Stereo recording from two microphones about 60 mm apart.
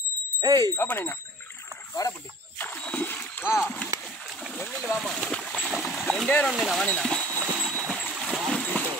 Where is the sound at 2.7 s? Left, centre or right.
Left.